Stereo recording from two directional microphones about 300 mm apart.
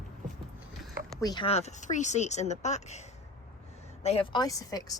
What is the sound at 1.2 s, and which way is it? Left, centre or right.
Speech, centre.